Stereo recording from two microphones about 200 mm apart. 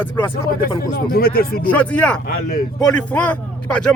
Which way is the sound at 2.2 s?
50° left (ahead or behind).